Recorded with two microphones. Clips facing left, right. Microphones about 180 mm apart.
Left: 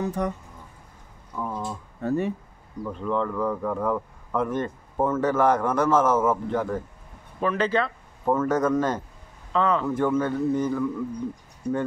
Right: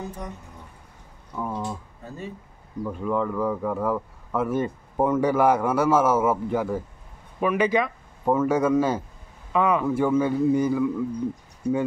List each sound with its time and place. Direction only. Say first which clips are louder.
0.0 s speech: left 8 dB; 70° left (ahead or behind)
1.5 s speech: right 2 dB; 10° right (ahead or behind)
2.0 s speech: left 11 dB; 65° left (ahead or behind)
2.8 s speech: right 1 dB; 10° right (ahead or behind)